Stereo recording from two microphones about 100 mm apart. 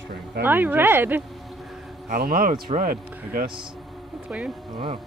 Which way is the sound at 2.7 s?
90° right.